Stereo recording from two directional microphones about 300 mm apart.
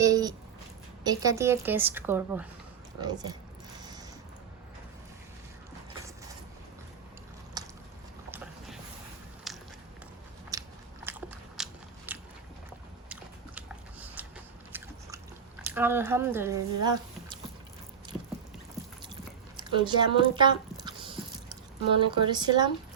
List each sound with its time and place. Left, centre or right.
0.0 s a sound: centre
1.0 s a woman's voice: centre
7.6 s a sound: centre
9.5 s walk: centre
10.5 s biting: centre
14.7 s biting: centre
15.7 s speech: centre
19.5 s a sound: centre
21.9 s a woman's voice: centre